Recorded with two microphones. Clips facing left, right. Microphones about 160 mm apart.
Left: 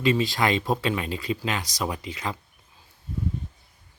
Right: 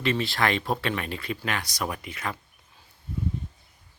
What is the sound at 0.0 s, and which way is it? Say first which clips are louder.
Speech: left 3 dB; 15° left (ahead or behind).